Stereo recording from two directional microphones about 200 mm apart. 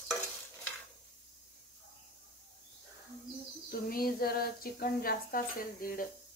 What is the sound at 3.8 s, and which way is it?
A woman's voice, 45° left (ahead or behind).